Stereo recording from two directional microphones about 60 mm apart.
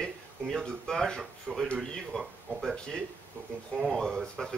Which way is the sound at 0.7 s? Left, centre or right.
Centre.